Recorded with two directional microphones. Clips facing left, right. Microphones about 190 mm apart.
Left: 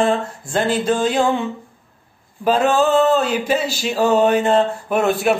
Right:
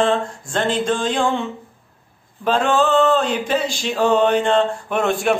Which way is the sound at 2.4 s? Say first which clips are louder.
Left 2 dB; 10° left (ahead or behind).